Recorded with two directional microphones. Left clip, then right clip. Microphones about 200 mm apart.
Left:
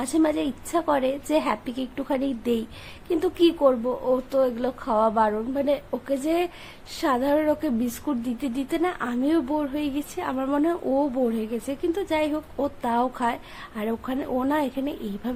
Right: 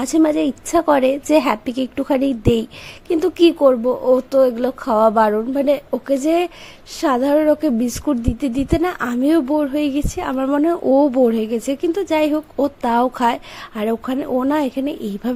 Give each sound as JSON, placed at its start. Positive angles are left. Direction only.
{"t": 0.0, "sound": "a woman's voice", "side_deg": -25}